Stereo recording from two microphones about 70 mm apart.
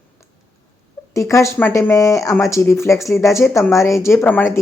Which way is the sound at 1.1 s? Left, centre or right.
Left.